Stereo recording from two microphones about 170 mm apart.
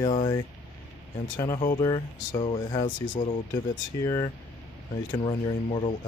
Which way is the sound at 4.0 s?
20° left (ahead or behind).